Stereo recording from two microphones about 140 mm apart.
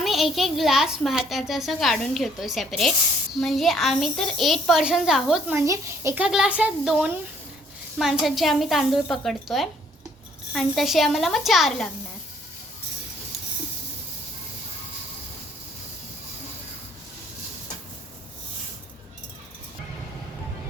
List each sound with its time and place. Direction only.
0.0 s a woman's voice: centre (ahead or behind)
5.5 s speech: 20° right (ahead or behind)
6.1 s a woman's voice: 5° right (ahead or behind)